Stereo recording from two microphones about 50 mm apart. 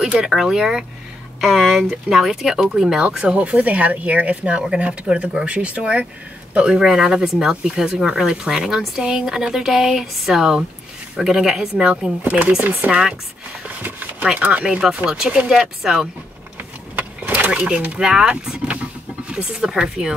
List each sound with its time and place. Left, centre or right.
0.0 s speech: centre
3.4 s speech: right
6.5 s speech: centre
12.3 s speech: right
14.2 s speech: right
17.6 s speech: right